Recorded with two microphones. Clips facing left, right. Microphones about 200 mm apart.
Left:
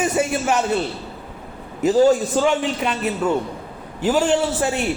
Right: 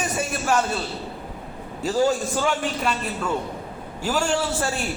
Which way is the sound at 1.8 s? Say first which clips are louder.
Left 6 dB; 20° left (ahead or behind).